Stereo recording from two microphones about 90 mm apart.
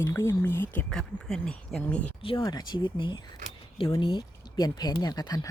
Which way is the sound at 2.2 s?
80° left.